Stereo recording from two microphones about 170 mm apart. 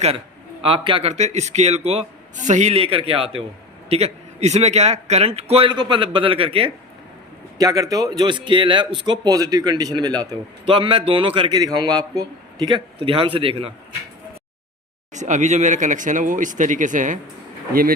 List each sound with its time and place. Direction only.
0.6 s a man's voice: 30° right (ahead or behind)
7.6 s a man's voice: 20° right (ahead or behind)
15.1 s speech: 45° right (ahead or behind)
17.7 s speech: 60° right (ahead or behind)